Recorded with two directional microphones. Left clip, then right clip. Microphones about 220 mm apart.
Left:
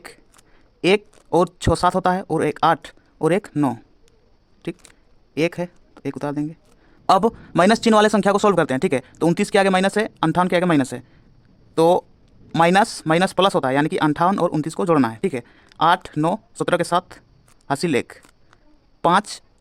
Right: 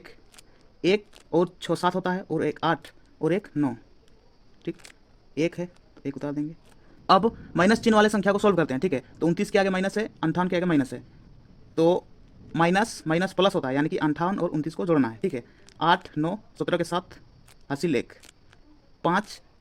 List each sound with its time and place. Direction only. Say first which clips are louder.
0.8 s speech: left 6 dB; 40° left (ahead or behind)